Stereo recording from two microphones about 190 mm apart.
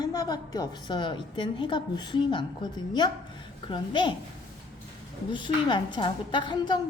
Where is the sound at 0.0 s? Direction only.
20° left (ahead or behind).